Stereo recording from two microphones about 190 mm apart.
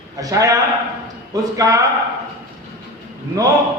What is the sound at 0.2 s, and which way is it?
A man's voice, 20° right (ahead or behind).